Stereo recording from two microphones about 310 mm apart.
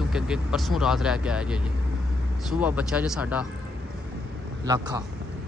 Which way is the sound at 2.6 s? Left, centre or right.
Centre.